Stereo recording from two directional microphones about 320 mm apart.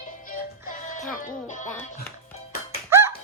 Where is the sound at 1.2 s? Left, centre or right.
Left.